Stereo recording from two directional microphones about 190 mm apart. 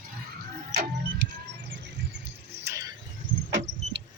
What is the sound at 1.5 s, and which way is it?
Bird, 65° right (ahead or behind).